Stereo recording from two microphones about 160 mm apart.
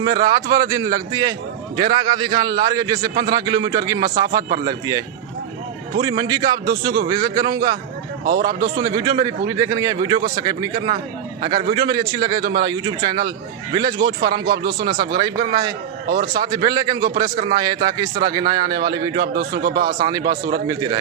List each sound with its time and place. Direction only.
0.0 s a man's voice: 25° right (ahead or behind)
8.5 s speech: 70° right (ahead or behind)
8.8 s a man's voice: 25° right (ahead or behind)
9.5 s a man's voice: 20° right (ahead or behind)
11.7 s a man's voice: 25° right (ahead or behind)
16.0 s speech: 55° right (ahead or behind)
16.4 s a man's voice: 25° right (ahead or behind)
17.2 s speech: 50° right (ahead or behind)
17.5 s a man's voice: 25° right (ahead or behind)
19.2 s speech: 80° right
20.0 s a man's voice: 25° right (ahead or behind)
20.3 s speech: 65° right (ahead or behind)